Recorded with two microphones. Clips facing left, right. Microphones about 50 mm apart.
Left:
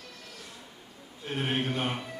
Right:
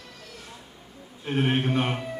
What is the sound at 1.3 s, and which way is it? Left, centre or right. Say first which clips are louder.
Speech: right 6 dB; right.